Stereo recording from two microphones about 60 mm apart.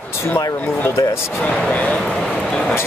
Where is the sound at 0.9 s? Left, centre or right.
Left.